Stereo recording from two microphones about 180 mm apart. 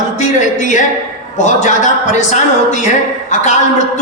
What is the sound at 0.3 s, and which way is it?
Speech, 45° left (ahead or behind).